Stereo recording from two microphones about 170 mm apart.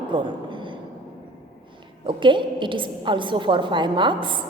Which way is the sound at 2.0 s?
30° right (ahead or behind).